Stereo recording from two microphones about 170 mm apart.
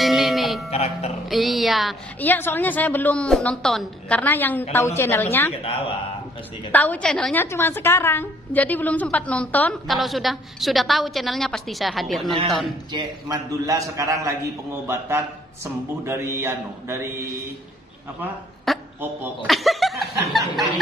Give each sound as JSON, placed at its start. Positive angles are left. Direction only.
{"t": 0.0, "sound": "music", "side_deg": 0}
{"t": 0.7, "sound": "music", "side_deg": 40}
{"t": 1.3, "sound": "a woman's voice", "side_deg": 0}
{"t": 2.1, "sound": "a woman's voice", "side_deg": 10}
{"t": 5.5, "sound": "speech", "side_deg": 35}
{"t": 6.7, "sound": "a woman's voice", "side_deg": 10}
{"t": 12.9, "sound": "a man's voice", "side_deg": -20}
{"t": 18.7, "sound": "a man's voice", "side_deg": 0}